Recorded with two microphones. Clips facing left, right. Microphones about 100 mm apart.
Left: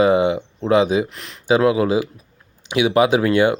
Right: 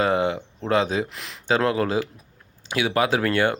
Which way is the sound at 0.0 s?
15° left (ahead or behind).